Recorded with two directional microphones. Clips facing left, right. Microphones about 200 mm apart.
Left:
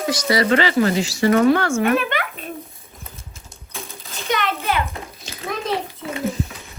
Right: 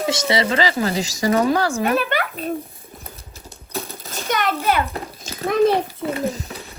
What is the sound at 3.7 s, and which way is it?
Coin, 45° right (ahead or behind).